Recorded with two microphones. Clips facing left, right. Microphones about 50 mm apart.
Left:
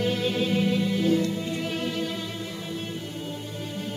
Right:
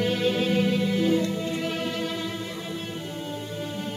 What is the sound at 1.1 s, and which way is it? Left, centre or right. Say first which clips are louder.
Music: even; centre.